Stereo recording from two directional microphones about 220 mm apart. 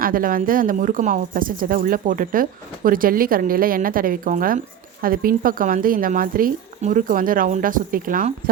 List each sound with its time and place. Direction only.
0.0 s speech: 40° right (ahead or behind)